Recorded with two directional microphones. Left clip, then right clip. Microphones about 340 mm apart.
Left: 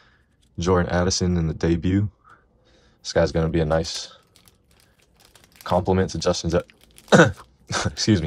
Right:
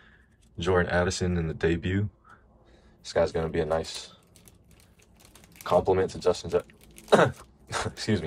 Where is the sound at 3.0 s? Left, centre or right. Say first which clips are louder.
Left 5 dB; left.